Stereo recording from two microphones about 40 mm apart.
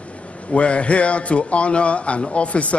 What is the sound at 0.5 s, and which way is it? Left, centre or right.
A man's voice, left.